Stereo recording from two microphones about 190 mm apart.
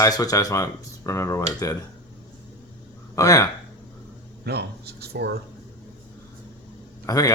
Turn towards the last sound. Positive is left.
turn(degrees=20)  # may be behind; listen again after turning